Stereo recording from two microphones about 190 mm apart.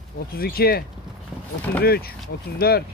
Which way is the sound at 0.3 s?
50° left (ahead or behind).